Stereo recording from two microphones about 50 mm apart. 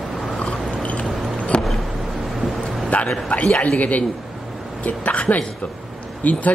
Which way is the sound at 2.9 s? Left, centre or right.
Left.